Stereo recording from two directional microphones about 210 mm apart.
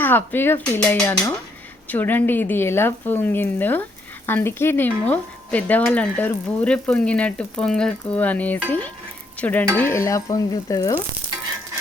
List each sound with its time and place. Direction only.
0.0 s speech: 10° left (ahead or behind)